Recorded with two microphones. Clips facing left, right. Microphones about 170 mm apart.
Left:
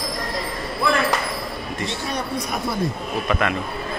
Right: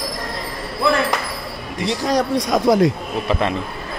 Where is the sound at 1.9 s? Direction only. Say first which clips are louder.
Right 11 dB; 90° right.